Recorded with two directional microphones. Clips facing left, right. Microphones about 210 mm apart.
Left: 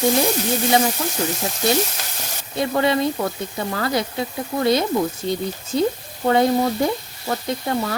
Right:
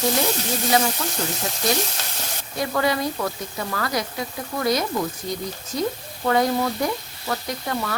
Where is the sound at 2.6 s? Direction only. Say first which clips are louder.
Left 4 dB; 25° left (ahead or behind).